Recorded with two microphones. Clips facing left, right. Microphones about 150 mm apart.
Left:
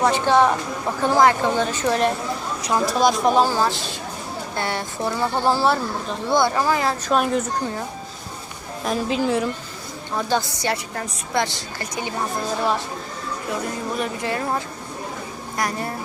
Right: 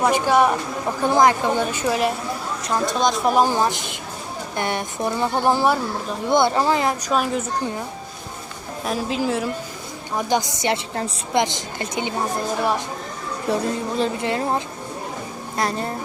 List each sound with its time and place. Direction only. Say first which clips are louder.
0.0 s a woman's voice: even; 10° right (ahead or behind)
3.3 s a woman's voice: even; 20° right (ahead or behind)
7.1 s a woman's voice: left 4 dB; centre (ahead or behind)
8.8 s a woman's voice: left 1 dB; centre (ahead or behind)
10.2 s a woman's voice: right 1 dB; 15° right (ahead or behind)
13.5 s a woman's voice: right 5 dB; 30° right (ahead or behind)